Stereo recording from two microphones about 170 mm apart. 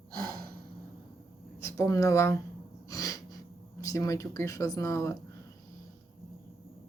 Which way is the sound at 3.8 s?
20° left (ahead or behind).